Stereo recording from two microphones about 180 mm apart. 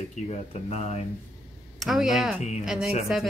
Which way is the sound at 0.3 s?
35° left (ahead or behind).